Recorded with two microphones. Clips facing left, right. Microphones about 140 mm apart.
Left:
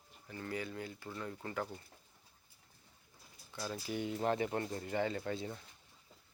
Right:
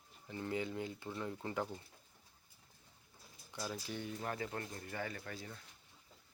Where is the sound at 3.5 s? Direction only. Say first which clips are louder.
Left 1 dB; 10° right (ahead or behind).